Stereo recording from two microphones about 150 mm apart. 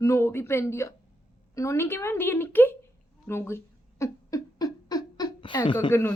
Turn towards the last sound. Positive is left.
turn(degrees=15)  # may be behind; listen again after turning